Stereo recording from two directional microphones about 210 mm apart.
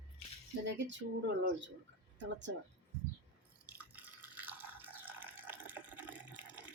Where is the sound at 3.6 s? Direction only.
5° right (ahead or behind).